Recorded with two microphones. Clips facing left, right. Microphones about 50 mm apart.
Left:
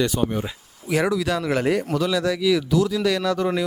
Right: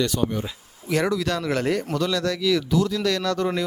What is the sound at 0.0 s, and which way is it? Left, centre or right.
Speech, centre.